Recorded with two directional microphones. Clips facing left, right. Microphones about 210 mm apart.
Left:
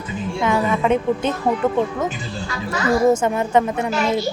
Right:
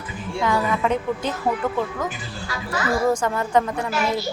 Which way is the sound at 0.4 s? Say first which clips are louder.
Left 3 dB; 20° left (ahead or behind).